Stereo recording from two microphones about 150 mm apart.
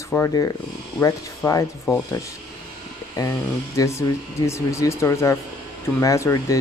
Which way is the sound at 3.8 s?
20° left (ahead or behind).